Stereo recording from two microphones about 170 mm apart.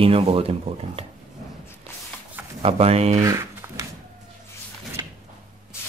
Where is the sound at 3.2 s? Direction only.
20° right (ahead or behind).